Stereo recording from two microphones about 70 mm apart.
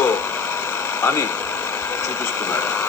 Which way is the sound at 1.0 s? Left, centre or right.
Left.